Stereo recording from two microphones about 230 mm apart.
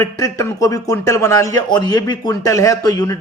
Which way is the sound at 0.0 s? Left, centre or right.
Centre.